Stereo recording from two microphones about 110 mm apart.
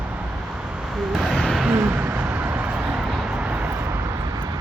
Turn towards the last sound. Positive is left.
turn(degrees=-30)  # may be behind; listen again after turning